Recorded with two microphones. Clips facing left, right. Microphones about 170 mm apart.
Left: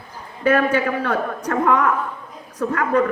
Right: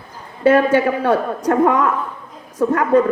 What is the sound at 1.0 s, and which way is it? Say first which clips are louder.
A woman's voice: right 6 dB; 30° right (ahead or behind).